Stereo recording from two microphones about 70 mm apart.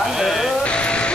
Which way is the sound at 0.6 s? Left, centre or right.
Centre.